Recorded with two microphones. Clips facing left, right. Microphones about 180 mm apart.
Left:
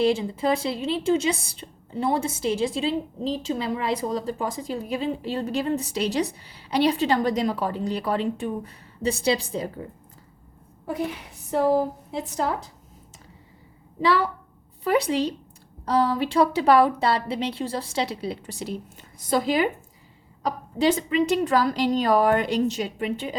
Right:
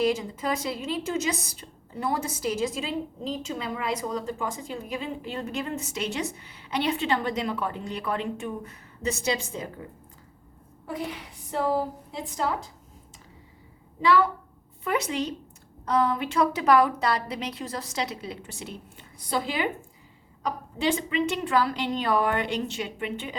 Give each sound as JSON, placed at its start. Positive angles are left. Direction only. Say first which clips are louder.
{"t": 0.0, "sound": "a woman's voice", "louder": "left 4 dB", "side_deg": 30}
{"t": 14.8, "sound": "a woman's voice", "louder": "left 5 dB", "side_deg": 35}